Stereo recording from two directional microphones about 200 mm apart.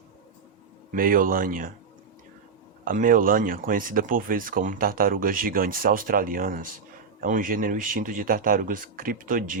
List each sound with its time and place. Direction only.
0.9 s speech: 45° right (ahead or behind)
2.8 s speech: 45° right (ahead or behind)